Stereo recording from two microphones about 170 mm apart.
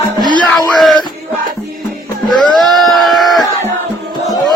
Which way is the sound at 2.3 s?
25° left (ahead or behind).